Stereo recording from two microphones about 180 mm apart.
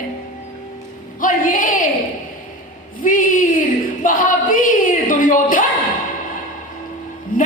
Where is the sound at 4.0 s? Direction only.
45° left (ahead or behind).